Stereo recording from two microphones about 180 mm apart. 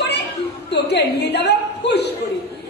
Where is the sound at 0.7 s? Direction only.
70° left (ahead or behind).